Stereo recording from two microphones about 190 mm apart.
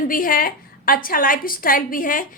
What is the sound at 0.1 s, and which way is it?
A woman's voice, 45° left (ahead or behind).